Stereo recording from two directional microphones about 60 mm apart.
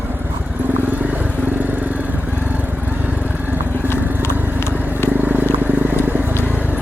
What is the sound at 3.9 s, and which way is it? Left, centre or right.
Vehicle, left.